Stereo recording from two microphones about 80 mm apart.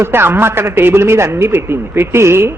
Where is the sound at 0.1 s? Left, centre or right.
Right.